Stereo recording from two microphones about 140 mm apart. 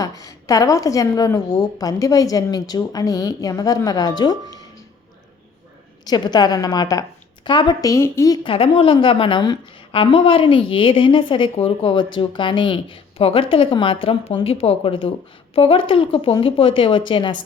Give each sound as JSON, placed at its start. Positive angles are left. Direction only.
{"t": 0.0, "sound": "a woman's voice", "side_deg": 25}
{"t": 4.4, "sound": "music", "side_deg": -25}
{"t": 6.1, "sound": "a woman's voice", "side_deg": 30}
{"t": 8.4, "sound": "a woman's voice", "side_deg": 40}